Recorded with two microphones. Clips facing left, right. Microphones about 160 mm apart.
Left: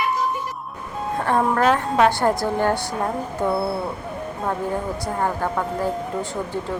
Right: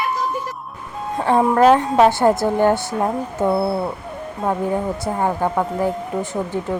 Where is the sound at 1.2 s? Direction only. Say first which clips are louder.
Right 5 dB; 15° right (ahead or behind).